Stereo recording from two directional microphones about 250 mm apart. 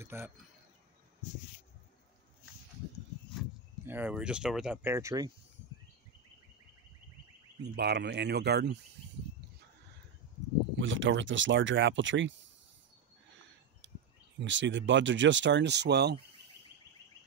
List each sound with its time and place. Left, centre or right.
0.0 s speech: centre
3.8 s speech: centre
7.6 s speech: right
10.8 s speech: right
14.4 s speech: right